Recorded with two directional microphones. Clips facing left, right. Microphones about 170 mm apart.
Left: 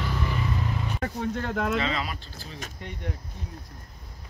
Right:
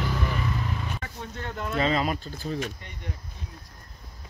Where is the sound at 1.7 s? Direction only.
40° right (ahead or behind).